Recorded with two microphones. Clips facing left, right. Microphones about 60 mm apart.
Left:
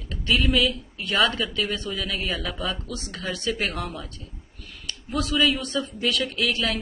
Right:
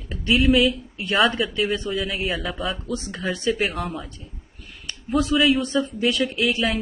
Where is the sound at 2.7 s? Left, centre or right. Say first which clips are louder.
Right 5 dB; centre.